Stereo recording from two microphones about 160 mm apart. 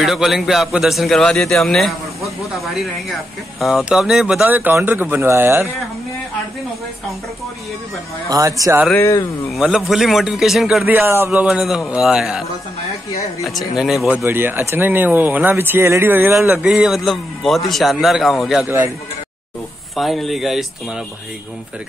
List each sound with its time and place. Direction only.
0.0 s a man's voice: centre (ahead or behind)
8.3 s speech: 20° right (ahead or behind)
8.9 s speech: 15° left (ahead or behind)
9.6 s a man's voice: centre (ahead or behind)
10.9 s a man's voice: 15° right (ahead or behind)
14.1 s speech: 15° right (ahead or behind)
20.0 s a man's voice: centre (ahead or behind)